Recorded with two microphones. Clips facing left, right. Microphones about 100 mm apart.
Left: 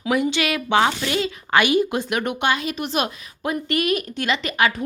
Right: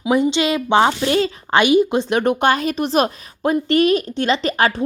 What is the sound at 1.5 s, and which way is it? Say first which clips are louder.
A woman's voice: right 4 dB; 20° right (ahead or behind).